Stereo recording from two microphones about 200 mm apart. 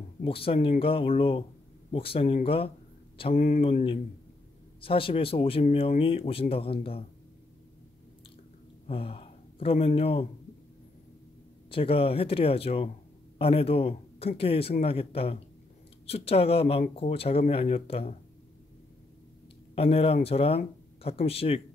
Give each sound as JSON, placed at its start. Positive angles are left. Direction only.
{"t": 0.2, "sound": "speech", "side_deg": 30}
{"t": 3.3, "sound": "speech", "side_deg": 40}
{"t": 8.8, "sound": "speech", "side_deg": 30}
{"t": 11.7, "sound": "speech", "side_deg": 30}
{"t": 19.7, "sound": "a man's voice", "side_deg": 30}